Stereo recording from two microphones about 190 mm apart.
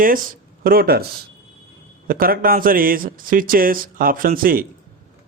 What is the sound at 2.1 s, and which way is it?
Speech, 50° right (ahead or behind).